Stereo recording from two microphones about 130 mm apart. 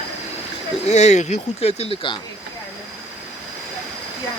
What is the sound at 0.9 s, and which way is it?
Speech, 60° left (ahead or behind).